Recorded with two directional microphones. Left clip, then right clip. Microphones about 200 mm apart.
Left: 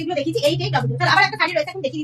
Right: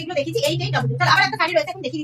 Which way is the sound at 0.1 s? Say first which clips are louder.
Left 1 dB; 10° left (ahead or behind).